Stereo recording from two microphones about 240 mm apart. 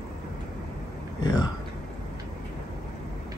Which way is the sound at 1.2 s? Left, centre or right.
Centre.